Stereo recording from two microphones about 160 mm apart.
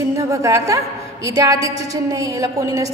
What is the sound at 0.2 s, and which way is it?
A woman's voice, 20° right (ahead or behind).